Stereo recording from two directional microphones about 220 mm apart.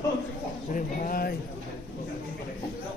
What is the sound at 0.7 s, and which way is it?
Speech, 35° left (ahead or behind).